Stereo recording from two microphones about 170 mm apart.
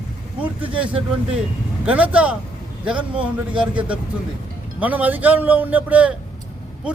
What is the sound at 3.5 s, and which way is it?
A man's voice, 5° right (ahead or behind).